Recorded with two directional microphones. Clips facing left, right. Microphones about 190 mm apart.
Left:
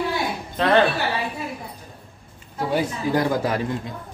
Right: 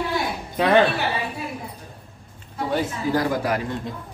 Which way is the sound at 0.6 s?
10° right (ahead or behind).